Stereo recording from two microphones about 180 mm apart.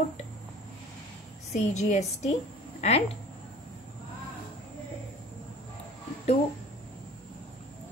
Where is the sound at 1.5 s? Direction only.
40° left (ahead or behind).